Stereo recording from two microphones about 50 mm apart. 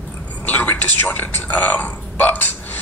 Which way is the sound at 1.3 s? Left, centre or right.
Left.